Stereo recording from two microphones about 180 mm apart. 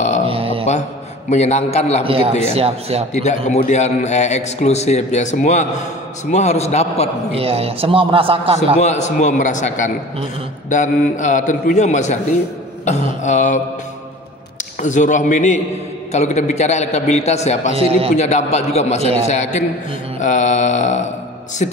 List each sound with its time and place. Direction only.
0.2 s mantra: 30° right (ahead or behind)
1.3 s a man's voice: 40° left (ahead or behind)
2.0 s a man's voice: 30° right (ahead or behind)
3.1 s a man's voice: 40° left (ahead or behind)
7.3 s a man's voice: 35° right (ahead or behind)
8.7 s a man's voice: 40° left (ahead or behind)
14.8 s a man's voice: 45° left (ahead or behind)
17.7 s a man's voice: 35° right (ahead or behind)
18.1 s a man's voice: 40° left (ahead or behind)